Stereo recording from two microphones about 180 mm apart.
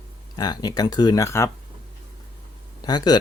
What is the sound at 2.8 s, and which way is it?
Speech, 20° left (ahead or behind).